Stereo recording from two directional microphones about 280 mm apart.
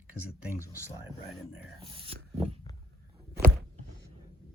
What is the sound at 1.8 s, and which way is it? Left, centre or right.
Speech, centre.